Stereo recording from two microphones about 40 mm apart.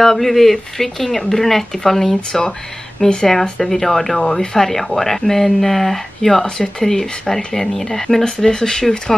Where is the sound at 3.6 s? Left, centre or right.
Centre.